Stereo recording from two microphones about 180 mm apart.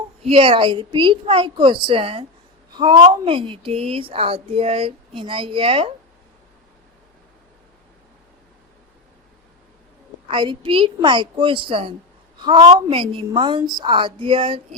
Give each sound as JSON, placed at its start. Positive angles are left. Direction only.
{"t": 0.3, "sound": "a woman's voice", "side_deg": -30}
{"t": 10.2, "sound": "a woman's voice", "side_deg": -25}